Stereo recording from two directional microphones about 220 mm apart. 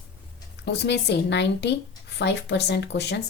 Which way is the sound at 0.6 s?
50° left (ahead or behind).